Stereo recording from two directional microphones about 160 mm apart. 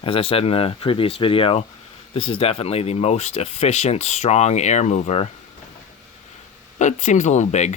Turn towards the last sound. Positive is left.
turn(degrees=45)  # may be behind; listen again after turning